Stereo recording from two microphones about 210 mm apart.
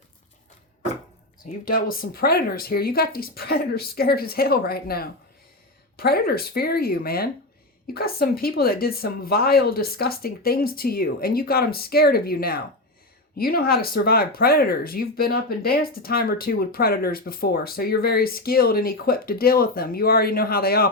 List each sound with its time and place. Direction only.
1.5 s speech: 40° left (ahead or behind)